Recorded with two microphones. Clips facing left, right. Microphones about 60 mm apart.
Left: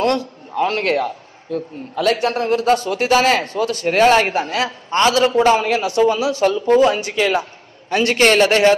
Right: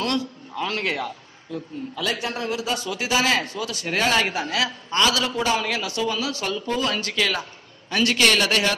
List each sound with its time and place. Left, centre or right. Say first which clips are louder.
0.0 s a man's voice: left 7 dB; left
6.4 s a man's voice: left 15 dB; left